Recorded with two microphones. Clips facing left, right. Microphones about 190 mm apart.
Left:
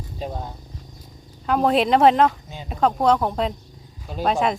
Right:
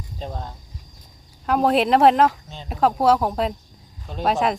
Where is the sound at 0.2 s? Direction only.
10° left (ahead or behind).